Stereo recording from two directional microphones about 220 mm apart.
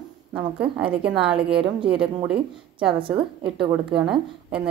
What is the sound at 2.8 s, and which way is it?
Speech, 25° right (ahead or behind).